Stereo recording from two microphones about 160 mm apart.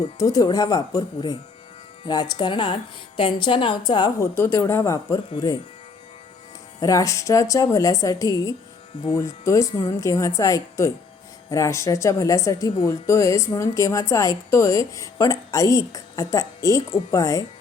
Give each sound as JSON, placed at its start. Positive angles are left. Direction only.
{"t": 0.2, "sound": "a woman's voice", "side_deg": 25}
{"t": 2.4, "sound": "a woman's voice", "side_deg": 30}
{"t": 4.4, "sound": "speech", "side_deg": 15}
{"t": 6.7, "sound": "a woman's voice", "side_deg": 20}